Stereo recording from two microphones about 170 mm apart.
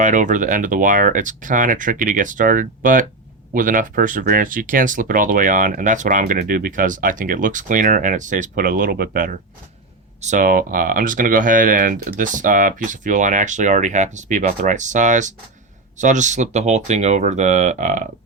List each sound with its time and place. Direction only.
0.0 s speech: 50° right (ahead or behind)